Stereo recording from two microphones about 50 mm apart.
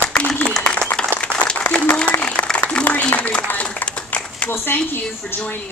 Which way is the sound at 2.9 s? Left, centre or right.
Left.